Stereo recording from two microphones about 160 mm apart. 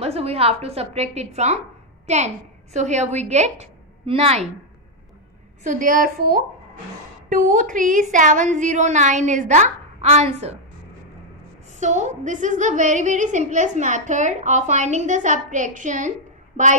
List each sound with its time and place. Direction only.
0.0 s a woman's voice: 40° right (ahead or behind)
5.6 s a woman's voice: 55° right (ahead or behind)
11.8 s a woman's voice: 50° right (ahead or behind)